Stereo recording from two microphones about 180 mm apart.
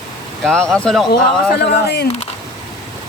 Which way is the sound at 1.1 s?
60° left (ahead or behind).